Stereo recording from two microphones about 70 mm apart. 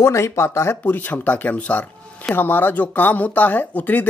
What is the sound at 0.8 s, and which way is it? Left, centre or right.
Speech, left.